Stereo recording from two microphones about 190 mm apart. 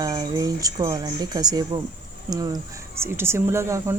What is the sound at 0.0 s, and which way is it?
A woman's voice, 20° right (ahead or behind).